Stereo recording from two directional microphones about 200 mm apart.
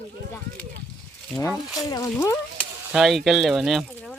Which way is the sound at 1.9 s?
15° left (ahead or behind).